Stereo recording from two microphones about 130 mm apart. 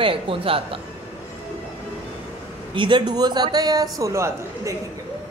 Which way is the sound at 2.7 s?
40° right (ahead or behind).